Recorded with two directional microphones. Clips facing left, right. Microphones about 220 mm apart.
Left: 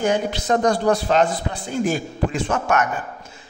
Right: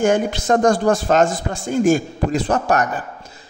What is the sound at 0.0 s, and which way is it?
Speech, 50° right (ahead or behind).